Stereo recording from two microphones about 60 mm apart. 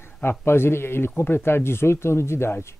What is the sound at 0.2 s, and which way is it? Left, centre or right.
Speech, left.